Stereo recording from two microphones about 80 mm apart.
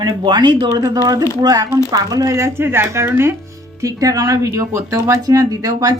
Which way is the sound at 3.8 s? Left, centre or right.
Right.